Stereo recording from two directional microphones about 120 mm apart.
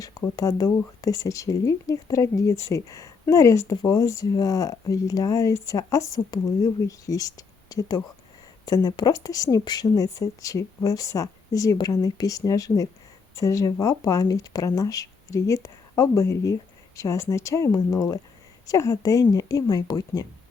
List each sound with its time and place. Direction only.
0.0 s a woman's voice: 30° left (ahead or behind)